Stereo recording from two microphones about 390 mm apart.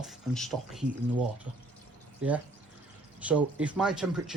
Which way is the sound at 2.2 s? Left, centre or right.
Centre.